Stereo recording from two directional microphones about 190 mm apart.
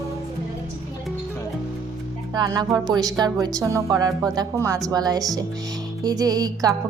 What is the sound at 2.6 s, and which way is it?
A woman's voice, 20° right (ahead or behind).